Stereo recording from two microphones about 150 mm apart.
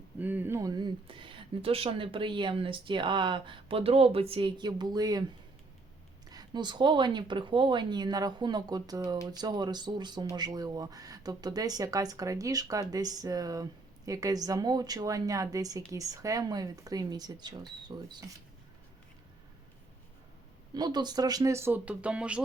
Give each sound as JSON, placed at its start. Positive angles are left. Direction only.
{"t": 0.2, "sound": "speech", "side_deg": -10}
{"t": 6.3, "sound": "speech", "side_deg": -30}
{"t": 20.7, "sound": "speech", "side_deg": -30}